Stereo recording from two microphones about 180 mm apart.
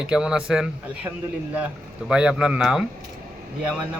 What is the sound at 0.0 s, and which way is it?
A man's voice, 5° right (ahead or behind).